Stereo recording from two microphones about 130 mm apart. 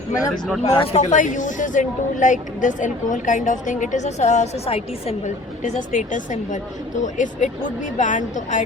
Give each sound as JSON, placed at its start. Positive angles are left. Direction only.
{"t": 0.6, "sound": "speech", "side_deg": 70}